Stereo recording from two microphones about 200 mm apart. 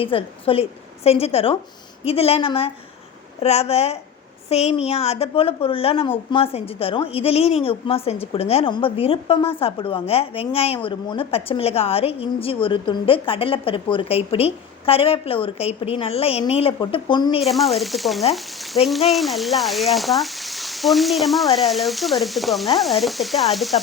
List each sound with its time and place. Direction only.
0.0 s a woman's voice: 25° left (ahead or behind)
17.4 s speech: centre (ahead or behind)